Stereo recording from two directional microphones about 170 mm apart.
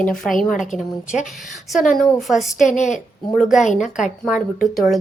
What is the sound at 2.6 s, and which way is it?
Speech, 45° left (ahead or behind).